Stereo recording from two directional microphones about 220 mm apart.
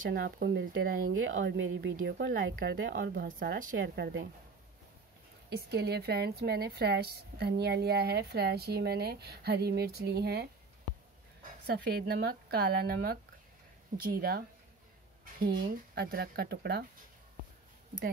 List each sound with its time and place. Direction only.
0.1 s a woman's voice: 50° right (ahead or behind)
3.3 s a woman's voice: 40° right (ahead or behind)
3.7 s a woman's voice: 50° right (ahead or behind)
5.7 s a woman's voice: 45° right (ahead or behind)
11.6 s a woman's voice: 45° right (ahead or behind)
15.4 s a woman's voice: 45° right (ahead or behind)